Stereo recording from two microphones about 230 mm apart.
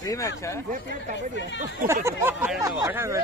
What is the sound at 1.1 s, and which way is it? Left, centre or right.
Speech, left.